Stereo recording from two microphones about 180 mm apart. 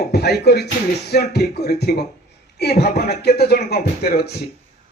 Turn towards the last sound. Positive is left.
turn(degrees=60)  # may be behind; listen again after turning